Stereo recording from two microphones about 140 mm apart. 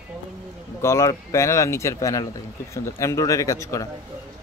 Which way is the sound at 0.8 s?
20° left (ahead or behind).